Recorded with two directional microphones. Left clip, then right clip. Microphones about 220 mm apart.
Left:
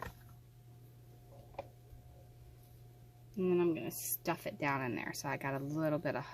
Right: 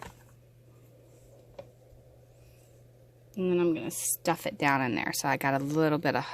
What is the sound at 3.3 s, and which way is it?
Speech, 45° right (ahead or behind).